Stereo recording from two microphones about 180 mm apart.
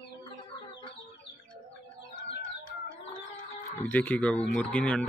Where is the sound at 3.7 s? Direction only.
10° left (ahead or behind).